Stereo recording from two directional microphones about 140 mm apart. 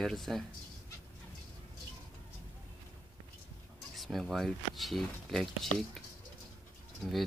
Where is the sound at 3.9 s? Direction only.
Centre (ahead or behind).